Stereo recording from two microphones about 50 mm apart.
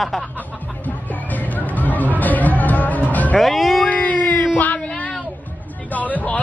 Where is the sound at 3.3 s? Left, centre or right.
Centre.